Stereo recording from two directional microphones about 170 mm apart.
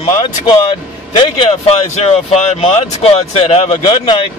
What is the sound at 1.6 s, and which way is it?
Speech, 40° left (ahead or behind).